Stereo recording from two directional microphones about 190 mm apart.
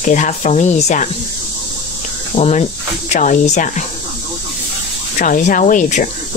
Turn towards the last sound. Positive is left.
turn(degrees=45)  # may be behind; listen again after turning